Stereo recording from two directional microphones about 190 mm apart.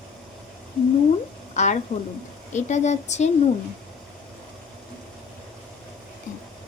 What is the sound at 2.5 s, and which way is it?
Speech, 40° left (ahead or behind).